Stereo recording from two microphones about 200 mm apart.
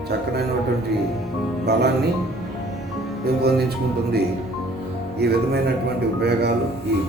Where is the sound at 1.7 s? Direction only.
55° right (ahead or behind).